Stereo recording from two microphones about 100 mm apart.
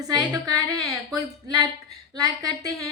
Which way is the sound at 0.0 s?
45° right (ahead or behind).